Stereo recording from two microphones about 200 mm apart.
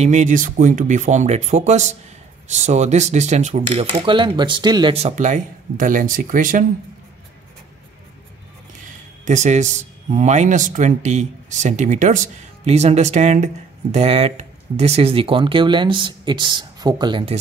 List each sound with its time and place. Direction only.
0.0 s speech: 35° right (ahead or behind)
9.2 s speech: 35° right (ahead or behind)